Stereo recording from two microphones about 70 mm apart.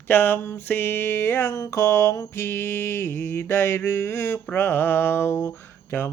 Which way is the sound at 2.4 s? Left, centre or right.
Left.